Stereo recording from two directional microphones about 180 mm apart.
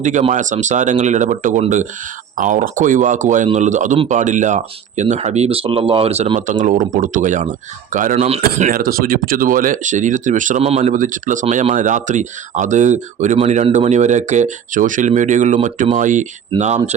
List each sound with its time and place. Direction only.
0.0 s speech: 40° right (ahead or behind)
8.1 s speech: 35° right (ahead or behind)
8.4 s speech: 50° right (ahead or behind)